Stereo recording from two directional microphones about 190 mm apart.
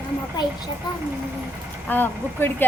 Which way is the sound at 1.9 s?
10° left (ahead or behind).